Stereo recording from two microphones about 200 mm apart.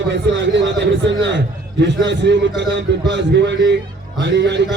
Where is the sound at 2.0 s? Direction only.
60° right (ahead or behind).